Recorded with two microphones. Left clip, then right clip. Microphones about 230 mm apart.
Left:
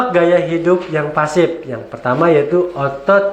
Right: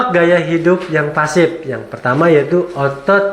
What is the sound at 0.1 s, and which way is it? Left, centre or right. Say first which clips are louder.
Speech: right 1 dB; right.